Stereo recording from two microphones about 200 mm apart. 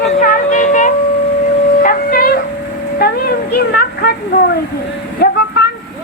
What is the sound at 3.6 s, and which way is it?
Speech, 50° left (ahead or behind).